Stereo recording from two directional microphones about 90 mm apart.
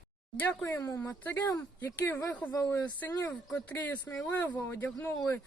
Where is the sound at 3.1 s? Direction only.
40° left (ahead or behind).